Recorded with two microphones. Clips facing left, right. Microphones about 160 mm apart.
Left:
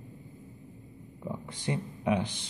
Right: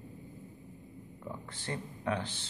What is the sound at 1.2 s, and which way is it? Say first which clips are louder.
Speech: left 7 dB; 15° left (ahead or behind).